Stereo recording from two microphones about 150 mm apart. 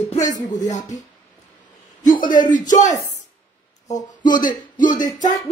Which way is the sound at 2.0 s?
65° left (ahead or behind).